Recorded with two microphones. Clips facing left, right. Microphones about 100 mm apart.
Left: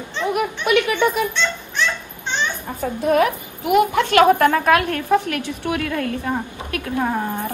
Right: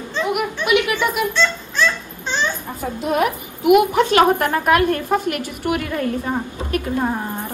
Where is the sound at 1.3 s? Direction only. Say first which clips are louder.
Right 3 dB; 20° left (ahead or behind).